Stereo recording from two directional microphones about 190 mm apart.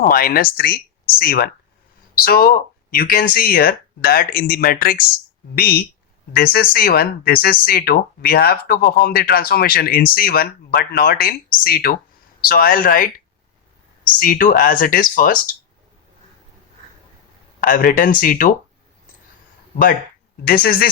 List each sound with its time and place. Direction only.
0.0 s speech: 50° left (ahead or behind)
17.6 s speech: 50° left (ahead or behind)
20.5 s speech: 50° left (ahead or behind)